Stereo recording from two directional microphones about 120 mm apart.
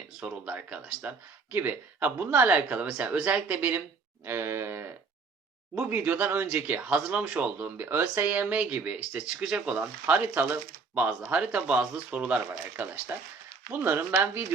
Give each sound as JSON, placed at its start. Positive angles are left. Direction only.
{"t": 0.2, "sound": "speech", "side_deg": -10}
{"t": 4.3, "sound": "cattle", "side_deg": -20}
{"t": 5.8, "sound": "speech", "side_deg": -15}